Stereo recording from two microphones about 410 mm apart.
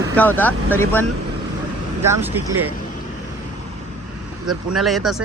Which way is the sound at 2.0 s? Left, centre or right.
Centre.